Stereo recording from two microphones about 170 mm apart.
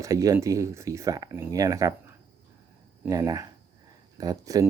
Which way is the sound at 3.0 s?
20° right (ahead or behind).